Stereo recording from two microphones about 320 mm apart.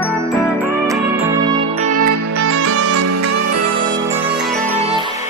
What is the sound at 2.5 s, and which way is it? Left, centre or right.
Music, right.